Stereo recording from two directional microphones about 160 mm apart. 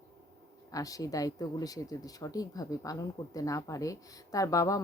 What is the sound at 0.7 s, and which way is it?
Speech, 20° left (ahead or behind).